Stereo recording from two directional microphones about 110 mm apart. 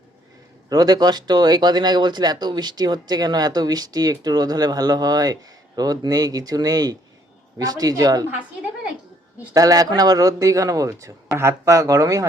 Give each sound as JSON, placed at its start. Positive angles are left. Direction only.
{"t": 0.7, "sound": "speech", "side_deg": -35}
{"t": 9.6, "sound": "speech", "side_deg": -35}